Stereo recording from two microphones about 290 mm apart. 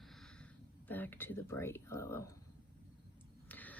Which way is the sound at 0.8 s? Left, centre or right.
Centre.